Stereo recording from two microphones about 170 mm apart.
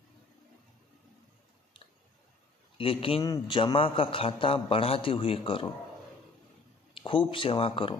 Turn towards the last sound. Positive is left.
turn(degrees=30)  # may be behind; listen again after turning